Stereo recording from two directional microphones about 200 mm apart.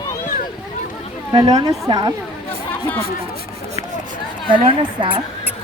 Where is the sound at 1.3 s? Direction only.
20° right (ahead or behind).